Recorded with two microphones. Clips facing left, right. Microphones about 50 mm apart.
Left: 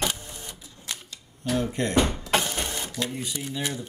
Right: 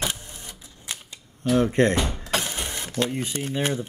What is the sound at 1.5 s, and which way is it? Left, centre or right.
Speech, right.